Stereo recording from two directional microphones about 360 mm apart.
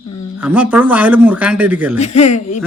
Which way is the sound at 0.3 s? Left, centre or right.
Centre.